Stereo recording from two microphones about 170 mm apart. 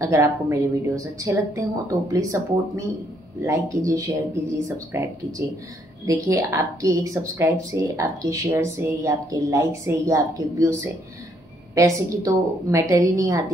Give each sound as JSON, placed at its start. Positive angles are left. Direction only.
{"t": 0.0, "sound": "a woman's voice", "side_deg": -15}